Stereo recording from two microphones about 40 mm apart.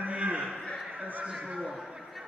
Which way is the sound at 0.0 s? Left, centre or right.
Right.